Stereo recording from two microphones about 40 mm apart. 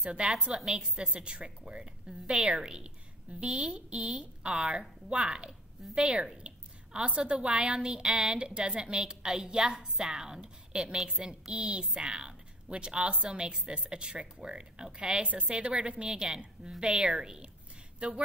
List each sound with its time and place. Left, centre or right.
0.0 s a woman's voice: right
0.3 s a woman's voice: centre